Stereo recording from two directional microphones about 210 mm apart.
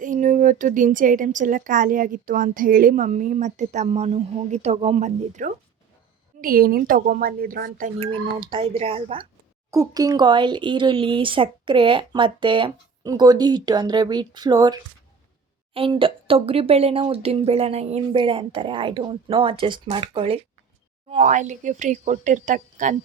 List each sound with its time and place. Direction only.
0.0 s a woman's voice: 35° right (ahead or behind)
7.9 s speech: 25° right (ahead or behind)
9.7 s a woman's voice: 15° right (ahead or behind); by 23.0 s 35° right (ahead or behind)